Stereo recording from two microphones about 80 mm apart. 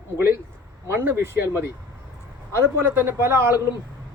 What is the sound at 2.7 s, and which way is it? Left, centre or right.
Speech, right.